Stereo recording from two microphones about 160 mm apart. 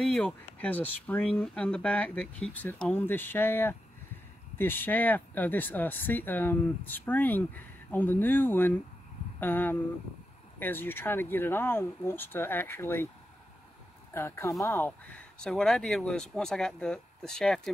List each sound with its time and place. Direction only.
0.0 s speech: centre (ahead or behind)
14.1 s speech: 15° left (ahead or behind)